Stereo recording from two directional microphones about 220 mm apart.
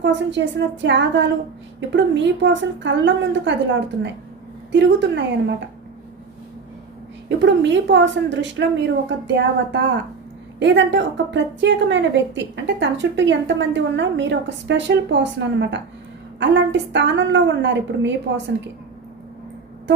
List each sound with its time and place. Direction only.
0.0 s a woman's voice: 55° right (ahead or behind)
7.3 s a woman's voice: 55° right (ahead or behind)